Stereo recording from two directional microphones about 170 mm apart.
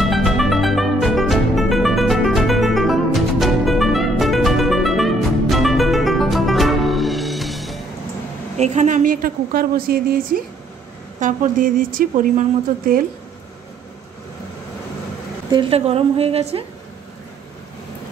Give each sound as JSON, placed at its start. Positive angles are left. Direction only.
{"t": 0.0, "sound": "music", "side_deg": 0}
{"t": 8.5, "sound": "a woman's voice", "side_deg": -40}
{"t": 15.5, "sound": "a woman's voice", "side_deg": -35}